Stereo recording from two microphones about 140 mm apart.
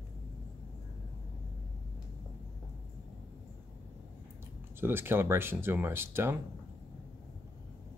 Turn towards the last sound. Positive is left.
turn(degrees=-15)  # may be behind; listen again after turning